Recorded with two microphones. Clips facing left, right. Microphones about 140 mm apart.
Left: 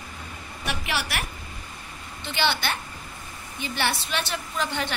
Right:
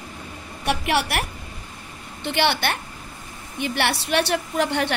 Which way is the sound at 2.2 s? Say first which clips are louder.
Right 4 dB; 60° right (ahead or behind).